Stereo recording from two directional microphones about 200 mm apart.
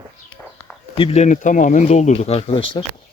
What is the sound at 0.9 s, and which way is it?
Speech, 30° left (ahead or behind).